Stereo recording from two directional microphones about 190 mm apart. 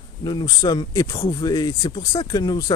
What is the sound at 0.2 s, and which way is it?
A man's voice, 20° left (ahead or behind).